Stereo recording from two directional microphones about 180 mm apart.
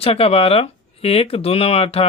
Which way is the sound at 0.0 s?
35° left (ahead or behind).